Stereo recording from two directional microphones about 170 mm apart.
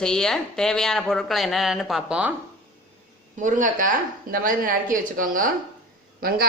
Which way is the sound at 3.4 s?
50° right (ahead or behind).